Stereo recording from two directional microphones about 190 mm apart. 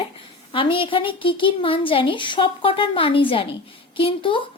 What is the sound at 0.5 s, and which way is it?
A woman's voice, 25° left (ahead or behind).